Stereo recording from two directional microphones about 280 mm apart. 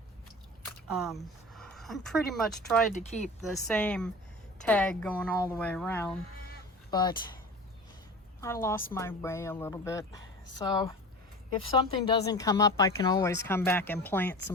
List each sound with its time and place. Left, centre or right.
0.9 s speech: centre
2.9 s speech: left
3.7 s speech: centre
8.4 s speech: centre